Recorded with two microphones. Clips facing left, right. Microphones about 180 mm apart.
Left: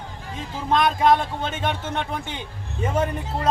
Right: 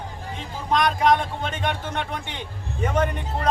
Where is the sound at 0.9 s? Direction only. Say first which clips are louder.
Left 1 dB; 25° left (ahead or behind).